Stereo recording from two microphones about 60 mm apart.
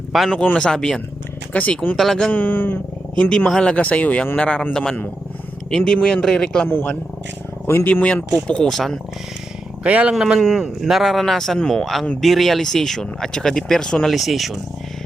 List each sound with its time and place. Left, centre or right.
0.1 s speech: centre
0.5 s speech: centre
1.5 s speech: left
2.0 s speech: centre
2.3 s speech: left
3.2 s speech: centre
5.7 s speech: centre
7.9 s speech: left
8.6 s speech: centre
9.8 s speech: right
10.2 s speech: centre